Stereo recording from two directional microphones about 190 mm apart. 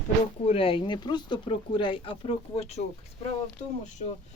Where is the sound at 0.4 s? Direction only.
30° left (ahead or behind).